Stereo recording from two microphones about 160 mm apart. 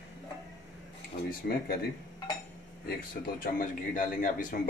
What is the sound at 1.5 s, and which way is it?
Speech, 70° left (ahead or behind).